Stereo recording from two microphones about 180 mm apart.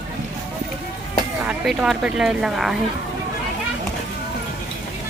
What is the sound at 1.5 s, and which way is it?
Speech, centre (ahead or behind).